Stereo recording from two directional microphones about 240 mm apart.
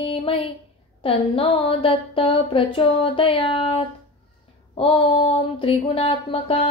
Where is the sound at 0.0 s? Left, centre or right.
Left.